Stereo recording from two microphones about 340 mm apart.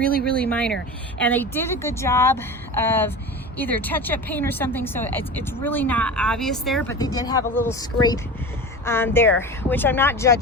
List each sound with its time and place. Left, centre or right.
0.2 s a woman's voice: centre